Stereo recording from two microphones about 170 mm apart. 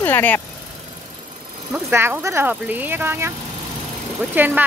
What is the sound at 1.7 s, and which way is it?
Speech, 15° right (ahead or behind).